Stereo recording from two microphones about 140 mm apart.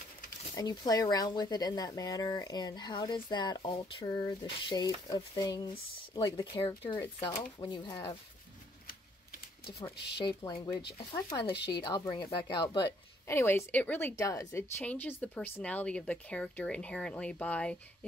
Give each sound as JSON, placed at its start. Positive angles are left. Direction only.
{"t": 0.6, "sound": "speech", "side_deg": 25}
{"t": 10.1, "sound": "speech", "side_deg": 35}
{"t": 13.3, "sound": "a woman's voice", "side_deg": 20}